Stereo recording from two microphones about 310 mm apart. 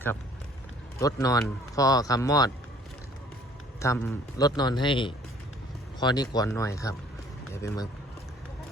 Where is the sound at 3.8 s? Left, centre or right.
Centre.